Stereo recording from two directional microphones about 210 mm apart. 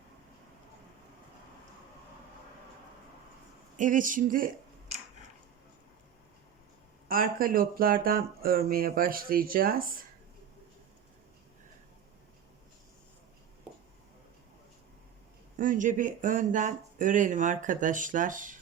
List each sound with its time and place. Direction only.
3.8 s speech: 40° right (ahead or behind)
7.1 s speech: 40° right (ahead or behind)
15.5 s speech: 40° right (ahead or behind)